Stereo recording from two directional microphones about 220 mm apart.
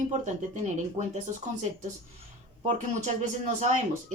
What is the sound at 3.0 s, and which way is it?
Speech, 35° right (ahead or behind).